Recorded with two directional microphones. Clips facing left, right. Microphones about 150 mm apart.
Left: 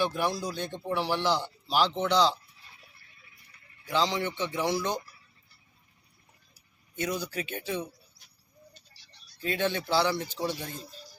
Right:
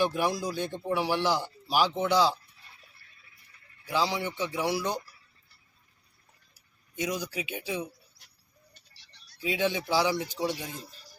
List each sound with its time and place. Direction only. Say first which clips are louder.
0.0 s speech: right 2 dB; 10° right (ahead or behind)
3.8 s speech: left 1 dB; 10° right (ahead or behind)
6.9 s speech: even; 10° right (ahead or behind)
9.0 s a sound: left 1 dB; 65° right (ahead or behind)
9.4 s speech: right 1 dB; 10° right (ahead or behind)